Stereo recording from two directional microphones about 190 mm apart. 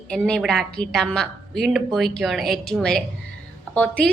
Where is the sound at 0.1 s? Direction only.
5° left (ahead or behind).